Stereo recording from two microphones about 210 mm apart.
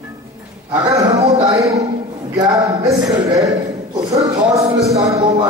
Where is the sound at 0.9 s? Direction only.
15° right (ahead or behind).